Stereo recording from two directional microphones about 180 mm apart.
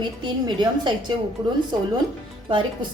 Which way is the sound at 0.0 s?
25° right (ahead or behind).